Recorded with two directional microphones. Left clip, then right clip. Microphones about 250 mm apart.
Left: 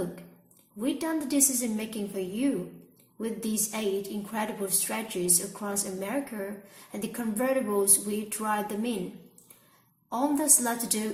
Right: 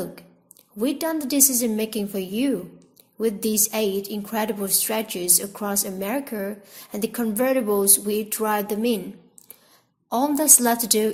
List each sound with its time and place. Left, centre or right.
0.8 s speech: right
10.1 s speech: right